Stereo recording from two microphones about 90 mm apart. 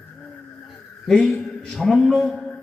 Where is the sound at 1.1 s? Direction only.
5° left (ahead or behind).